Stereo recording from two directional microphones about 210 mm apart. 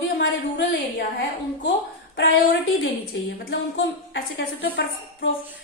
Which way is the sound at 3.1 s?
60° left (ahead or behind).